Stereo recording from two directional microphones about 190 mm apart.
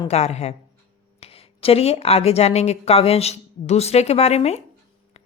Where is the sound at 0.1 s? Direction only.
35° left (ahead or behind).